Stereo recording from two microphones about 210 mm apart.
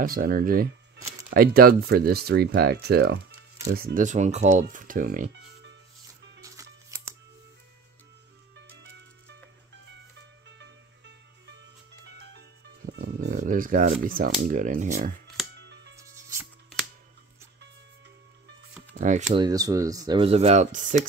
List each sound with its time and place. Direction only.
0.0 s speech: 45° right (ahead or behind)
6.4 s music: 15° right (ahead or behind)
10.4 s music: 55° right (ahead or behind); by 13.9 s 40° right (ahead or behind)
14.0 s speech: 40° right (ahead or behind)
15.5 s music: 55° right (ahead or behind)
16.0 s music: 15° right (ahead or behind)
18.9 s speech: 35° right (ahead or behind)
19.3 s speech: 20° right (ahead or behind); by 21.1 s 40° right (ahead or behind)